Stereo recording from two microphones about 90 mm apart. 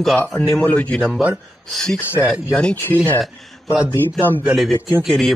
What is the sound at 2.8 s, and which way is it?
Speech, 20° left (ahead or behind).